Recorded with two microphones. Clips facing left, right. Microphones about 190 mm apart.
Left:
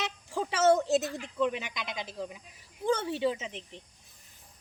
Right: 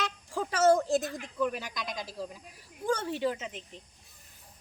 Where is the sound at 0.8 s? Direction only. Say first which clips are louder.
Left 1 dB; 25° left (ahead or behind).